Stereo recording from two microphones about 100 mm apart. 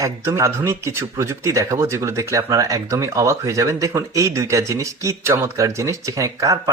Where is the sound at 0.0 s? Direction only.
30° right (ahead or behind).